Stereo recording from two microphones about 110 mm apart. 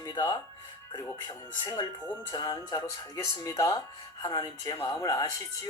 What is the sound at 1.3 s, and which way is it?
Speech, 35° left (ahead or behind).